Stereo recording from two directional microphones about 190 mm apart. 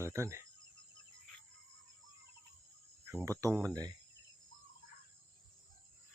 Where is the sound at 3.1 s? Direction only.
15° right (ahead or behind).